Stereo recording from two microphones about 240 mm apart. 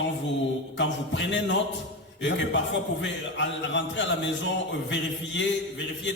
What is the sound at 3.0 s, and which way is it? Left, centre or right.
A man's voice, left.